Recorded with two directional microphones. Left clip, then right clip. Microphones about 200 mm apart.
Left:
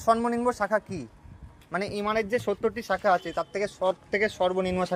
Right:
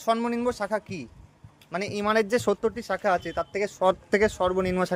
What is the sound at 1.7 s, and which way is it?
Speech, 15° right (ahead or behind).